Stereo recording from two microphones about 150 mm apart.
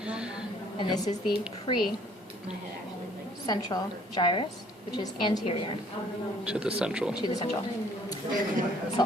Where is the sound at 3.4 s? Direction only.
30° left (ahead or behind).